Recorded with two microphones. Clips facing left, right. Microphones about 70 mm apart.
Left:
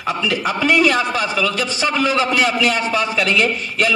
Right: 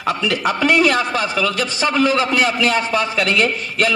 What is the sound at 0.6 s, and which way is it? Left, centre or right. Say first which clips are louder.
A man's voice: even; right.